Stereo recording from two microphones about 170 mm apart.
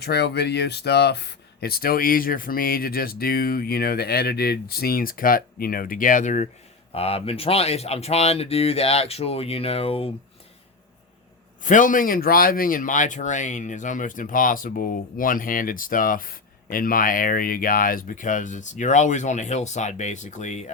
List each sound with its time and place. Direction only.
0.0 s speech: 75° left (ahead or behind); by 10.1 s 35° left (ahead or behind)
11.6 s speech: 50° left (ahead or behind)